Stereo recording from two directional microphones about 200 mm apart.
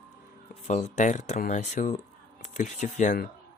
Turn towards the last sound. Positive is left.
turn(degrees=45)  # may be behind; listen again after turning